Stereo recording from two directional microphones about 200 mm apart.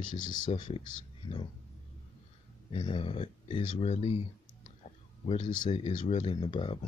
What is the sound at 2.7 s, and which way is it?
Speech, 25° left (ahead or behind).